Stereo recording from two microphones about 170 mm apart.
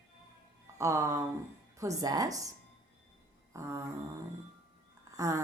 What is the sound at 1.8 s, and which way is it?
Speech, 20° right (ahead or behind).